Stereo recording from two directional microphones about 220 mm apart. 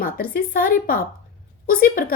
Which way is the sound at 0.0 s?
40° left (ahead or behind).